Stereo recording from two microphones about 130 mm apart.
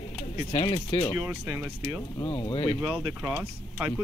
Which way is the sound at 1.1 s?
15° right (ahead or behind).